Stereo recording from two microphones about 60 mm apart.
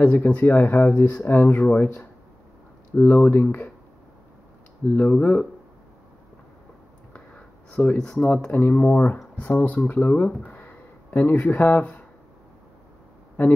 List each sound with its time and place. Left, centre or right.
0.0 s speech: left
4.8 s speech: left
7.2 s a sound: centre
8.0 s speech: centre
8.5 s speech: left
10.4 s a sound: left